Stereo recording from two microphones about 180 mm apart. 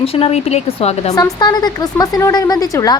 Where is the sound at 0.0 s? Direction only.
35° left (ahead or behind).